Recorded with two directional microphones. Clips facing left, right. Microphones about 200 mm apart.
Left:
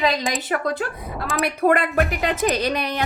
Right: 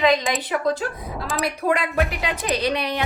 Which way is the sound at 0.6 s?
60° left (ahead or behind).